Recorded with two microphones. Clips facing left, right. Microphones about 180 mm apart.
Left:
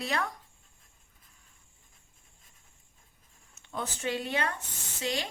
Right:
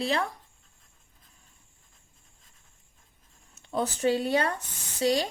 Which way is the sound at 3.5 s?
35° right (ahead or behind).